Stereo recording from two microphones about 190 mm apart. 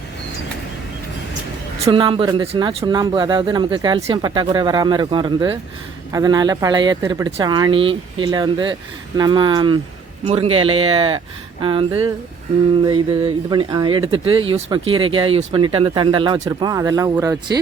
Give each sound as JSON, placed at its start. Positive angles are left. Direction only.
{"t": 1.8, "sound": "speech", "side_deg": -25}